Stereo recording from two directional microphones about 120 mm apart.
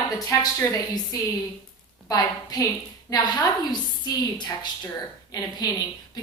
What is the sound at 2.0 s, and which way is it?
Speech, 30° left (ahead or behind).